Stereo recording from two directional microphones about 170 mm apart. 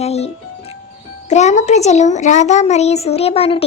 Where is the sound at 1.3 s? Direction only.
40° left (ahead or behind).